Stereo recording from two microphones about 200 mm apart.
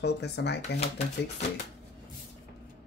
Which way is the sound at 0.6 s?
30° left (ahead or behind).